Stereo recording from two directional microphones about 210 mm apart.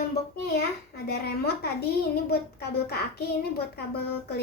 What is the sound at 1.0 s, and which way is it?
Speech, 50° left (ahead or behind).